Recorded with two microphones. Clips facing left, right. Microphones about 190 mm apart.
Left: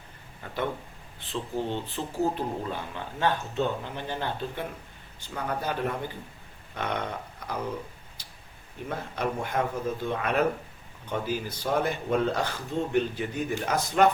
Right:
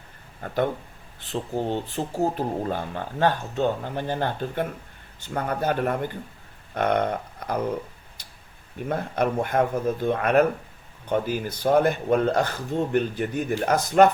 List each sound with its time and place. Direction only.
0.4 s speech: 45° right (ahead or behind)
6.7 s a sound: 50° right (ahead or behind)
8.9 s speech: 55° right (ahead or behind)